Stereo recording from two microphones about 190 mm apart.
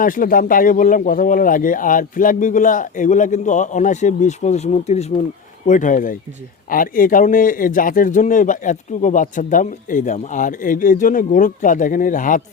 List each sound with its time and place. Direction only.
0.0 s a man's voice: 45° left (ahead or behind)